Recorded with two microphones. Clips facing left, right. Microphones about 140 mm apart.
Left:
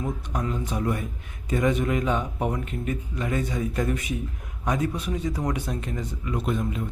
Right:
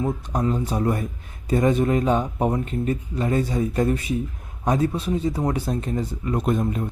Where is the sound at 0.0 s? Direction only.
35° right (ahead or behind).